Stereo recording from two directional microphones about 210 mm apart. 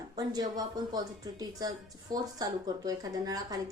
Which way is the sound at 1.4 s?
20° right (ahead or behind).